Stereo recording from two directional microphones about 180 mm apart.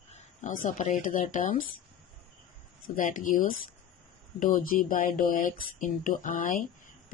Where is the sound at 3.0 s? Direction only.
50° left (ahead or behind).